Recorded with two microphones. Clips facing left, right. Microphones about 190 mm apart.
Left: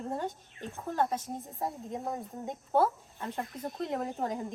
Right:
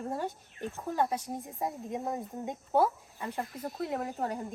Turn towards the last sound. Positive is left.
turn(degrees=-5)  # may be behind; listen again after turning